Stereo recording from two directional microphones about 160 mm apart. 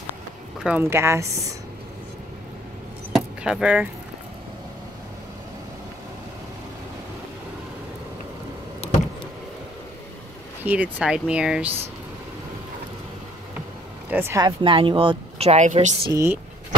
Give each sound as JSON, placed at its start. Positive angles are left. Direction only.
{"t": 0.7, "sound": "speech", "side_deg": -15}
{"t": 3.4, "sound": "speech", "side_deg": -5}
{"t": 8.8, "sound": "vehicle", "side_deg": 40}
{"t": 10.6, "sound": "speech", "side_deg": -10}
{"t": 14.1, "sound": "speech", "side_deg": -15}
{"t": 14.4, "sound": "speech", "side_deg": -30}
{"t": 16.1, "sound": "speech", "side_deg": -20}